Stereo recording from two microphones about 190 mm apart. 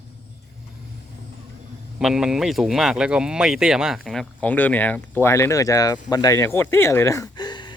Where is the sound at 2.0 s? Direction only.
Centre (ahead or behind).